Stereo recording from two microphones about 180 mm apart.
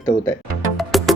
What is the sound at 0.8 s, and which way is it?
Music, centre (ahead or behind).